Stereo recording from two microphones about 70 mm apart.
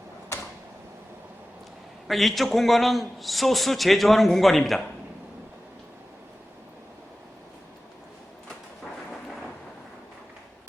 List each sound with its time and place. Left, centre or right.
2.0 s a man's voice: centre